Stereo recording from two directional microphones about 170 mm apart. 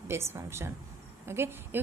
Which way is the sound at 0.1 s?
15° right (ahead or behind).